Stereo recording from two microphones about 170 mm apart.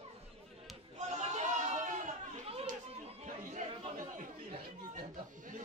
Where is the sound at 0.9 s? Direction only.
40° right (ahead or behind).